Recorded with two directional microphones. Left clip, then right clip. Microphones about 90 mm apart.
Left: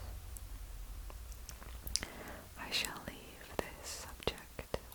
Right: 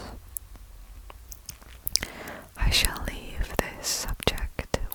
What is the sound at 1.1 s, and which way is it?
Whispering, 30° right (ahead or behind).